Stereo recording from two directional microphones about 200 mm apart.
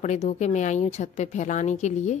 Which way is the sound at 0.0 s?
35° left (ahead or behind).